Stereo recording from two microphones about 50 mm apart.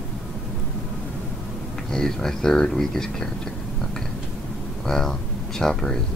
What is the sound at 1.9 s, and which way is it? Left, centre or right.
Speech, centre.